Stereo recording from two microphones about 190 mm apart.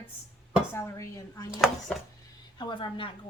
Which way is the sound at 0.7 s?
15° left (ahead or behind).